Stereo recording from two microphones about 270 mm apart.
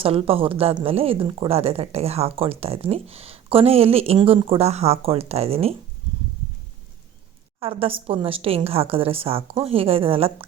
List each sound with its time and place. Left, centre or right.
0.0 s speech: right
7.6 s speech: right